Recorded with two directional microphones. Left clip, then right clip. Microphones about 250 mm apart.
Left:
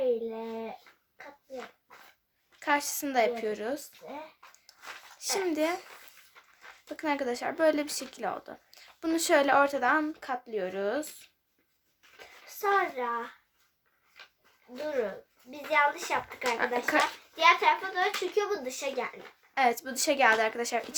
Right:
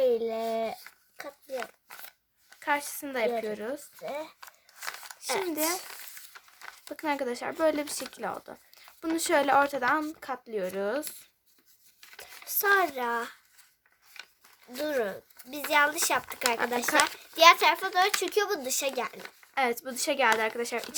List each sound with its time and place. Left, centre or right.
0.3 s a sound: right
2.6 s speech: centre
5.2 s speech: centre
6.9 s speech: centre
12.2 s a child's voice: right
15.4 s a child's voice: right
16.6 s speech: centre
17.3 s a child's voice: right
19.5 s speech: centre